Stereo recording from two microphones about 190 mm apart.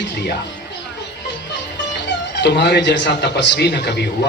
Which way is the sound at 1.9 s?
65° left (ahead or behind).